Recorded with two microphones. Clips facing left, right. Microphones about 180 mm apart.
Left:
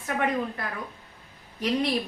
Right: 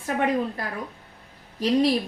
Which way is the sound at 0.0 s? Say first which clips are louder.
Right 3 dB; 30° right (ahead or behind).